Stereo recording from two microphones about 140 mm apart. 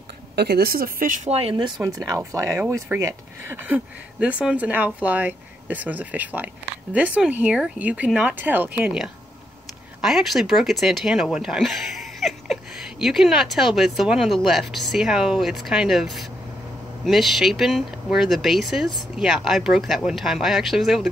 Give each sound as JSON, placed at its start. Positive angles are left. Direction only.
{"t": 0.5, "sound": "speech", "side_deg": -90}
{"t": 1.3, "sound": "speech", "side_deg": -40}
{"t": 2.3, "sound": "speech", "side_deg": -25}